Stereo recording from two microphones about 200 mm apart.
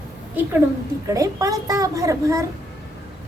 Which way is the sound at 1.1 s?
15° right (ahead or behind).